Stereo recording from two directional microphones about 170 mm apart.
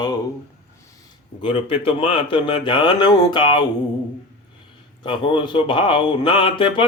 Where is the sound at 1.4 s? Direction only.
30° left (ahead or behind).